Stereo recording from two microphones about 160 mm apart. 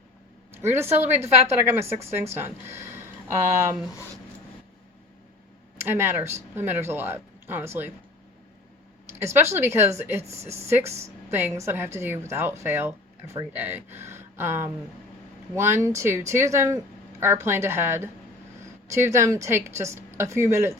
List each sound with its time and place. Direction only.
0.5 s speech: 15° right (ahead or behind)
1.8 s a woman's voice: 40° right (ahead or behind)
2.4 s speech: 15° right (ahead or behind)
5.8 s speech: 15° right (ahead or behind)
9.1 s speech: 15° right (ahead or behind)
10.3 s speech: 40° right (ahead or behind)
11.3 s speech: 15° right (ahead or behind)